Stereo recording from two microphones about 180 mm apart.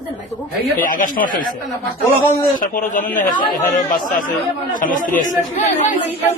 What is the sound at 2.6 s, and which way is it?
Speech, 45° left (ahead or behind).